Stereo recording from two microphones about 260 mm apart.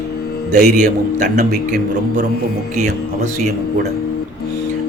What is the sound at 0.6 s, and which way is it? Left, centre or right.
Speech, right.